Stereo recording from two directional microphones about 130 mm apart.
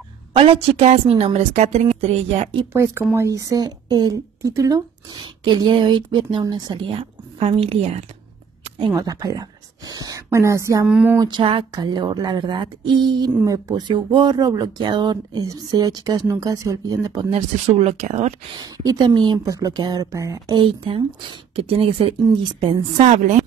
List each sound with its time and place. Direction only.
0.4 s a woman's voice: 45° right (ahead or behind)
2.7 s speech: 20° right (ahead or behind)
7.0 s a woman's voice: 50° right (ahead or behind)
8.6 s a sound: 45° right (ahead or behind)
8.9 s speech: 30° right (ahead or behind)
10.9 s a sound: 5° right (ahead or behind)
11.1 s speech: 35° right (ahead or behind)
13.3 s speech: 25° right (ahead or behind)
17.3 s speech: 55° right (ahead or behind)
18.6 s speech: 30° right (ahead or behind)
20.6 s a woman's voice: 45° right (ahead or behind)
23.0 s a woman's voice: 75° right (ahead or behind)